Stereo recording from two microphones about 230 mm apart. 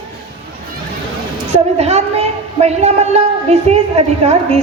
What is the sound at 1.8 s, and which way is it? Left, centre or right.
A woman's voice, right.